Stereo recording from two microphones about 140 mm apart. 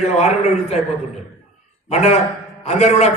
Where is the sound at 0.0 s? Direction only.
50° left (ahead or behind).